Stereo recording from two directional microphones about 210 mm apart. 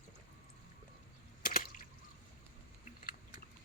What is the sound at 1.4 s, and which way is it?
Water, 40° left (ahead or behind).